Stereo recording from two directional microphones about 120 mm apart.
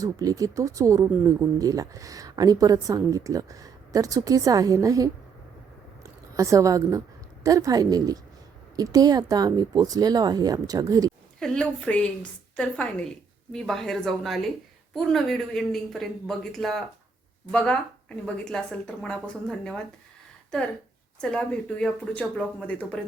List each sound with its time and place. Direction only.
0.0 s a woman's voice: 30° right (ahead or behind)
11.3 s a man's voice: 5° left (ahead or behind)
21.2 s speech: 5° left (ahead or behind)